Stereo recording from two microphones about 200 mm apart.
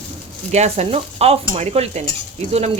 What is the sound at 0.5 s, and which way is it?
Speech, 35° right (ahead or behind).